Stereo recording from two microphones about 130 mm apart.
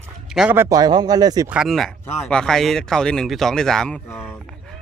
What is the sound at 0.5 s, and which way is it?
Speech, 15° right (ahead or behind).